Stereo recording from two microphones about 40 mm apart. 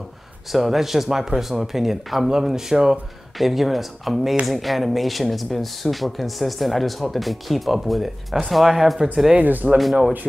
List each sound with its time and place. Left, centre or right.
0.5 s speech: centre
3.3 s speech: centre
9.4 s speech: right